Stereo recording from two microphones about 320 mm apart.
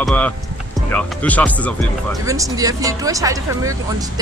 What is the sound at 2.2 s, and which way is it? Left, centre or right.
Speech, centre.